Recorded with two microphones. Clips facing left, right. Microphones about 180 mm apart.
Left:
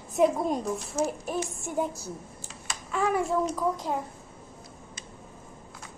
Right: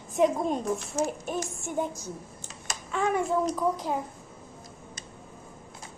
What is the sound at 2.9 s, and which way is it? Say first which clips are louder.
A child's voice: even; 5° left (ahead or behind).